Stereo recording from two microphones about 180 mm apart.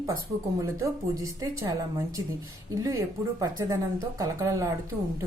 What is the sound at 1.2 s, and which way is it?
A woman's voice, 20° right (ahead or behind).